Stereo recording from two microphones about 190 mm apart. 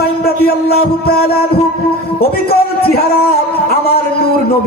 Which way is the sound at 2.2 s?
55° left (ahead or behind).